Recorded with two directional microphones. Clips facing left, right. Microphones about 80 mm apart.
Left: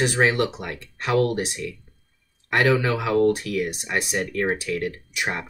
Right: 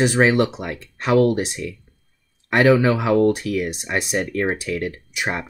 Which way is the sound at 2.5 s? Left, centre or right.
Right.